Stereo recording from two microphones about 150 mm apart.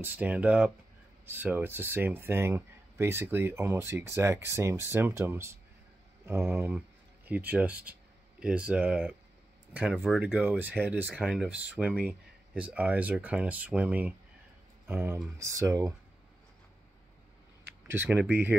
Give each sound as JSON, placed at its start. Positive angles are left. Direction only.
{"t": 0.0, "sound": "speech", "side_deg": -15}
{"t": 17.8, "sound": "speech", "side_deg": -15}